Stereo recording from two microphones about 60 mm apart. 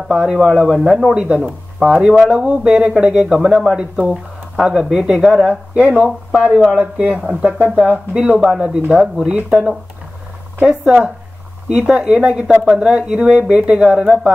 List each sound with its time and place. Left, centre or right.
0.1 s speech: centre
0.4 s speech: centre
5.5 s speech: right